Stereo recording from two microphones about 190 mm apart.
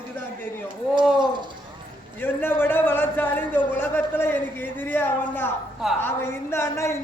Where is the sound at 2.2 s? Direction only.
10° left (ahead or behind).